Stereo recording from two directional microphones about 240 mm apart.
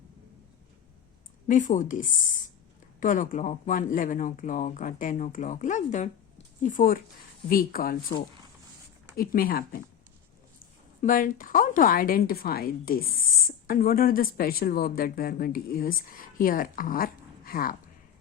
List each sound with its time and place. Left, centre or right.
1.5 s speech: left
9.1 s speech: left
11.0 s speech: left